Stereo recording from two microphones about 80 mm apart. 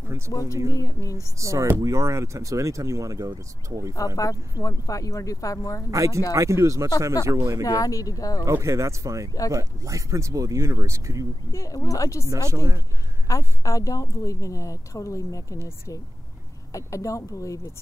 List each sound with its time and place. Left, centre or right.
0.3 s a woman's voice: left
1.4 s speech: right
4.2 s a woman's voice: left
5.9 s speech: right
7.6 s a woman's voice: left
8.5 s speech: right
11.5 s a woman's voice: left
12.3 s speech: right
13.3 s a woman's voice: left
16.7 s speech: left